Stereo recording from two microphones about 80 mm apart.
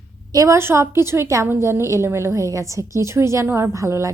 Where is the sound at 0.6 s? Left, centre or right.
Right.